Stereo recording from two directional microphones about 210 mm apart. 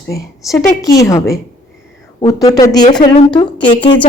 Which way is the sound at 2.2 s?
15° left (ahead or behind).